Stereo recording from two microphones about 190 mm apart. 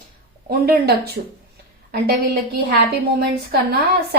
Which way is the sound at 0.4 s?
55° right (ahead or behind).